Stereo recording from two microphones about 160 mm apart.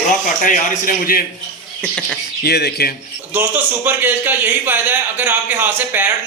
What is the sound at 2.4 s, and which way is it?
Speech, 90° left.